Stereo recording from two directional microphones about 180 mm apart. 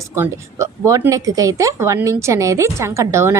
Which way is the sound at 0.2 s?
15° right (ahead or behind).